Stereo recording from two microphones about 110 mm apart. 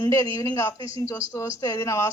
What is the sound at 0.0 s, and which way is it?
A man's voice, 30° left (ahead or behind).